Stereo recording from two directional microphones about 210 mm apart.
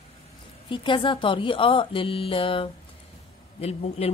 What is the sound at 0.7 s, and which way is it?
A woman's voice, 25° left (ahead or behind).